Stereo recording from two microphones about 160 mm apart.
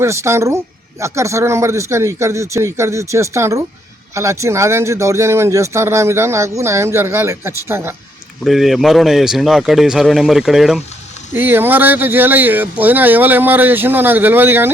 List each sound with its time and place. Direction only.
0.0 s speech: 15° right (ahead or behind)
8.4 s speech: centre (ahead or behind)
11.3 s speech: 15° right (ahead or behind)